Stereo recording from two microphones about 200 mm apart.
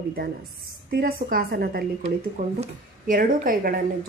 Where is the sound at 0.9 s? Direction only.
45° right (ahead or behind).